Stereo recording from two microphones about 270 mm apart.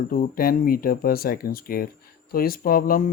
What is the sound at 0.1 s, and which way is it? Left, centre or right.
Speech, left.